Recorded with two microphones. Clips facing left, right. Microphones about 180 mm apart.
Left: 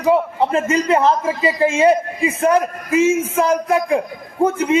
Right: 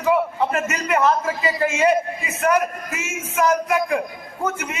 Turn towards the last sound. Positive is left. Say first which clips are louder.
# left 11 dB
turn(degrees=30)  # may be behind; listen again after turning